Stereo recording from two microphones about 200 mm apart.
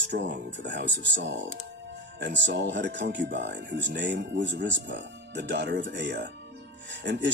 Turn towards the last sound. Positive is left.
turn(degrees=-60)  # may be behind; listen again after turning